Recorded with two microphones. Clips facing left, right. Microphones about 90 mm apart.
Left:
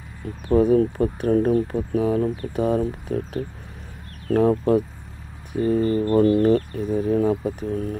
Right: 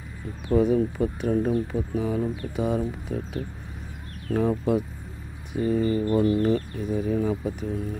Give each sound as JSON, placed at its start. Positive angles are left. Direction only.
{"t": 0.5, "sound": "speech", "side_deg": 50}
{"t": 4.3, "sound": "speech", "side_deg": 60}
{"t": 5.5, "sound": "speech", "side_deg": 45}